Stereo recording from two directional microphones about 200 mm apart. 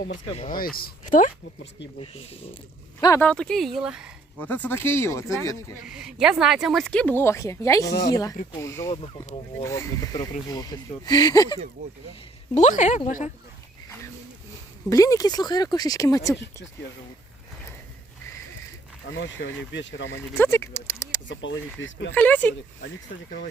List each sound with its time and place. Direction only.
0.3 s speech: 30° left (ahead or behind)
0.5 s speech: 45° left (ahead or behind)
3.2 s speech: 5° left (ahead or behind)
4.4 s speech: 10° left (ahead or behind)
5.8 s speech: 5° right (ahead or behind); by 8.9 s 15° left (ahead or behind)
8.9 s speech: 30° left (ahead or behind)
9.6 s speech: 15° left (ahead or behind)
12.5 s speech: 35° left (ahead or behind)
14.8 s speech: 15° left (ahead or behind)
19.1 s speech: 65° left (ahead or behind)
20.1 s speech: 10° left (ahead or behind)
21.2 s speech: 65° left (ahead or behind)
22.1 s speech: 10° left (ahead or behind)